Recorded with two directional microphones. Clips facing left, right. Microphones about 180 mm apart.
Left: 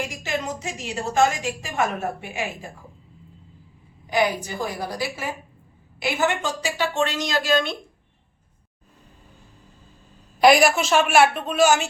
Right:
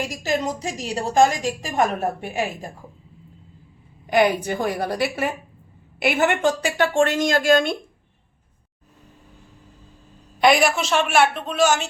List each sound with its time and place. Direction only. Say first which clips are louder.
0.1 s a woman's voice: right 4 dB; 40° right (ahead or behind)
4.0 s a woman's voice: right 4 dB; 60° right (ahead or behind)
10.4 s a woman's voice: left 2 dB; 5° left (ahead or behind)